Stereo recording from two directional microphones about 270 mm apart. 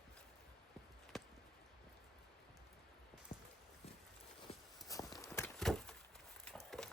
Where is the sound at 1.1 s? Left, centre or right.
Centre.